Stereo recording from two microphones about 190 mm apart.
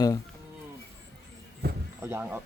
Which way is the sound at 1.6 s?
55° right (ahead or behind).